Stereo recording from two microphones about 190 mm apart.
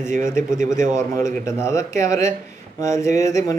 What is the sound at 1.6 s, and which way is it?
Speech, 15° left (ahead or behind).